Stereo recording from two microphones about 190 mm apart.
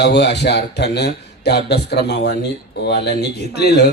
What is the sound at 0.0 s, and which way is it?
A man's voice, 60° left (ahead or behind).